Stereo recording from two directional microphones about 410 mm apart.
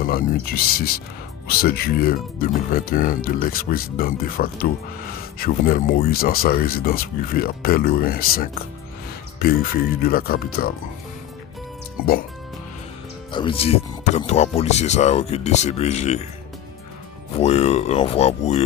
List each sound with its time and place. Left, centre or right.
0.0 s speech: centre
13.3 s speech: centre
17.4 s speech: centre